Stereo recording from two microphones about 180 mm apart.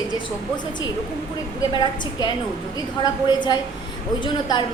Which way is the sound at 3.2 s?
25° left (ahead or behind).